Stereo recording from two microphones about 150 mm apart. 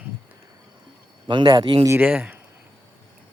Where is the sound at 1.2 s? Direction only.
30° right (ahead or behind).